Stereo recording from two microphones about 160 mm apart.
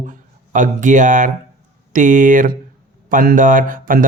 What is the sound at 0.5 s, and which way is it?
Speech, 55° right (ahead or behind).